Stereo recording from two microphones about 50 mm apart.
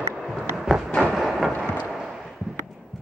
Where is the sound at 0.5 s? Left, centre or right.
Centre.